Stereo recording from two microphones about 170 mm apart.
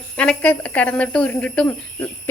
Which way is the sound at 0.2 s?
5° left (ahead or behind).